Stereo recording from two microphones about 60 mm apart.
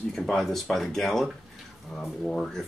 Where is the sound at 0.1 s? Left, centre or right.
Centre.